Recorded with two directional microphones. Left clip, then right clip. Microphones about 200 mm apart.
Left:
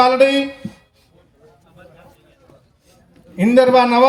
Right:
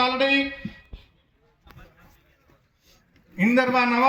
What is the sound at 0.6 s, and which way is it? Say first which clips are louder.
Music: left 5 dB; 55° left (ahead or behind).